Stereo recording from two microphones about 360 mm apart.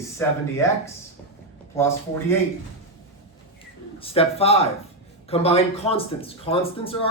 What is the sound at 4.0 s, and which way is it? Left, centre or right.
Speech, centre.